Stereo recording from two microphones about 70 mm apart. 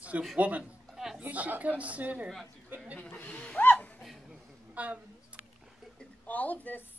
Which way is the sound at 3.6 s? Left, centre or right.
Left.